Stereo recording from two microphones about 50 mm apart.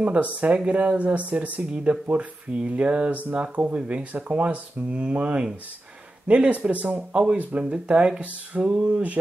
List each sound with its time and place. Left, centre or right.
0.0 s speech: right